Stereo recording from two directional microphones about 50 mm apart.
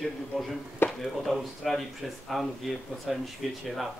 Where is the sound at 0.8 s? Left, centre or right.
Left.